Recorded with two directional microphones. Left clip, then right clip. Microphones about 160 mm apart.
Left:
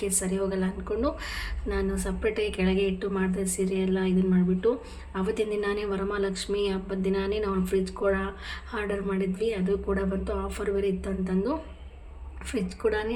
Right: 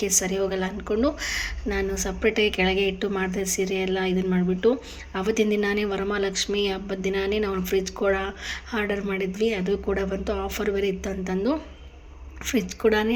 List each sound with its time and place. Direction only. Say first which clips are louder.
0.0 s a woman's voice: right 5 dB; 30° right (ahead or behind)